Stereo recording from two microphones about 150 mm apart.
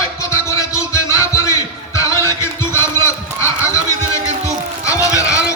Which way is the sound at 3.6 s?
20° left (ahead or behind).